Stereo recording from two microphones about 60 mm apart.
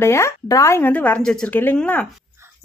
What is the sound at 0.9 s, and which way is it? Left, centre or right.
Speech, left.